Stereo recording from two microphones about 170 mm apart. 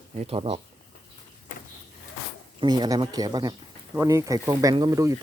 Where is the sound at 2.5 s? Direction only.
25° right (ahead or behind).